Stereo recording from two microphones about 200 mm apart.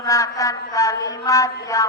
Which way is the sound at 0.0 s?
15° left (ahead or behind).